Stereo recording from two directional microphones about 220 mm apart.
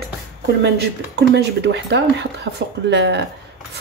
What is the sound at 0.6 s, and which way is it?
Speech, 50° right (ahead or behind).